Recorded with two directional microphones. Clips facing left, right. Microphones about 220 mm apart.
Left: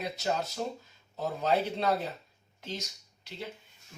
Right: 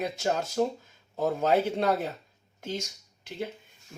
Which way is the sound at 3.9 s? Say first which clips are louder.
Right 5 dB; 50° right (ahead or behind).